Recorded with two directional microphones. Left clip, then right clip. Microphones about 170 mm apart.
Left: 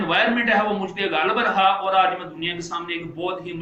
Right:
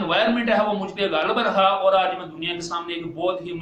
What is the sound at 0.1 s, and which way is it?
A man's voice, 40° right (ahead or behind).